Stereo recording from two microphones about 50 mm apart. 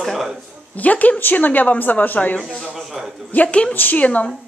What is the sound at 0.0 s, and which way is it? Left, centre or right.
Speech, centre.